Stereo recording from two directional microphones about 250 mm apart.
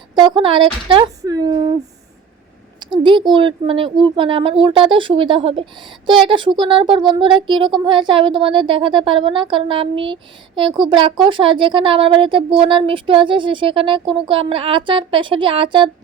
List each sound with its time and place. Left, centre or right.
0.2 s speech: centre
2.9 s speech: centre